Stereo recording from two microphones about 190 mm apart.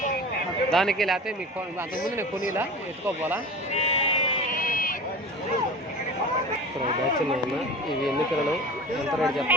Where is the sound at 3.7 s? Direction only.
30° left (ahead or behind).